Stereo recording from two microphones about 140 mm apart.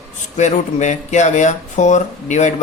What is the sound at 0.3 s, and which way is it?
A man's voice, 60° left (ahead or behind).